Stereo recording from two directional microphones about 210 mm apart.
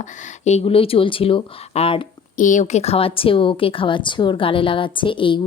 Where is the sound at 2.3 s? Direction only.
40° left (ahead or behind).